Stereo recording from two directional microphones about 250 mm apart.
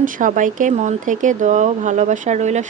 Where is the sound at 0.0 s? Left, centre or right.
Right.